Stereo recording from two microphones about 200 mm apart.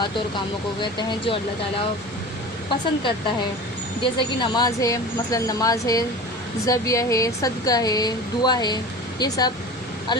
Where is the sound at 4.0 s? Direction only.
25° left (ahead or behind).